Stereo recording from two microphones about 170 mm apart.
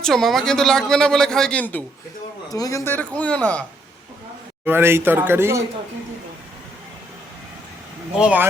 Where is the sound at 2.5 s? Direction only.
20° left (ahead or behind).